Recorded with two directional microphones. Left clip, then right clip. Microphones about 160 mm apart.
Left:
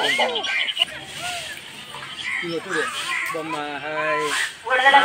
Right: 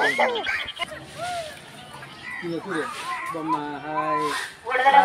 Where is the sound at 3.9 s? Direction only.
65° right (ahead or behind).